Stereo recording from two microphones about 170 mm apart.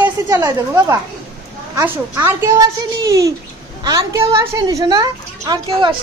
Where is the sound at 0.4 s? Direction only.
20° right (ahead or behind).